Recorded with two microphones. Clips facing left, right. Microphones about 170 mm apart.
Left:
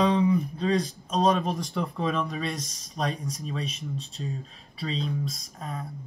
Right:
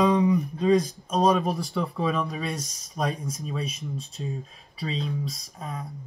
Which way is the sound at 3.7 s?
40° right (ahead or behind).